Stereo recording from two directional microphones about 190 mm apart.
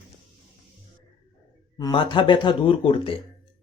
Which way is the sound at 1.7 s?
25° left (ahead or behind).